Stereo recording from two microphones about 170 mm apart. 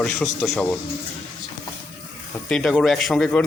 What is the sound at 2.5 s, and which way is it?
Speech, 5° left (ahead or behind).